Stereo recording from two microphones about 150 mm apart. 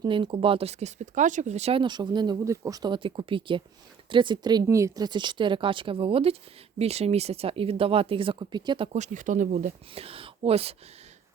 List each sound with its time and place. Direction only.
0.0 s speech: 35° right (ahead or behind)
8.9 s speech: 55° right (ahead or behind)
9.9 s speech: 40° right (ahead or behind)